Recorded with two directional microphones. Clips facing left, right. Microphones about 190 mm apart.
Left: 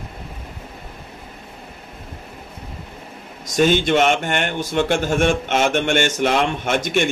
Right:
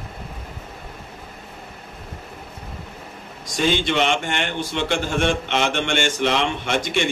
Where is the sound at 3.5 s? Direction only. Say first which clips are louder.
Left 5 dB; 50° left (ahead or behind).